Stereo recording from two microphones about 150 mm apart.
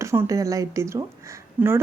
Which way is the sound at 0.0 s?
20° right (ahead or behind).